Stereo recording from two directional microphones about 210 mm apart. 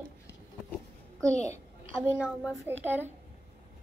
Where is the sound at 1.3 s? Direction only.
30° left (ahead or behind).